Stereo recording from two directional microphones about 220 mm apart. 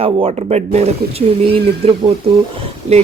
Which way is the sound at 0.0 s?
25° right (ahead or behind).